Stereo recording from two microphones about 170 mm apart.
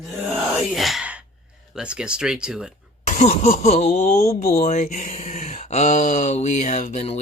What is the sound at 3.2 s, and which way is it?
Speech, 40° left (ahead or behind).